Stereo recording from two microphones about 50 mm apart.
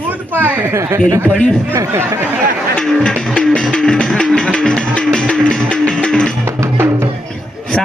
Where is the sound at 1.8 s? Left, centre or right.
Right.